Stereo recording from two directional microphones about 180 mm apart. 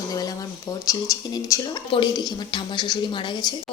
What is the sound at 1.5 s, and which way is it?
Speech, 20° left (ahead or behind).